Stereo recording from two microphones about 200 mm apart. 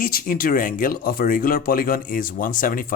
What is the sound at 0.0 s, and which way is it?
Speech, 45° left (ahead or behind).